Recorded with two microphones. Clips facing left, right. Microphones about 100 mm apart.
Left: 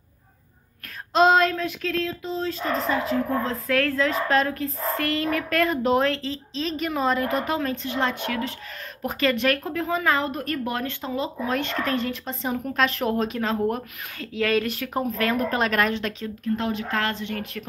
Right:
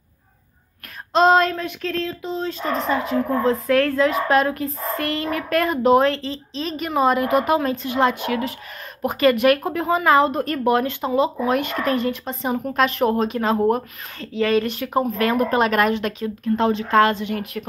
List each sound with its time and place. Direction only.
1.1 s speech: centre (ahead or behind); by 8.5 s 15° right (ahead or behind)
9.0 s speech: 5° right (ahead or behind)
9.7 s speech: 20° right (ahead or behind); by 13.0 s centre (ahead or behind)
13.0 s speech: 45° right (ahead or behind)
13.3 s speech: 10° right (ahead or behind)
14.1 s speech: 5° left (ahead or behind)
16.5 s speech: 30° right (ahead or behind)
17.0 s speech: 15° right (ahead or behind)